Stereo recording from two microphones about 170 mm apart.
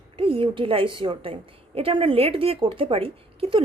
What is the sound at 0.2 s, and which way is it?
A woman's voice, 30° right (ahead or behind).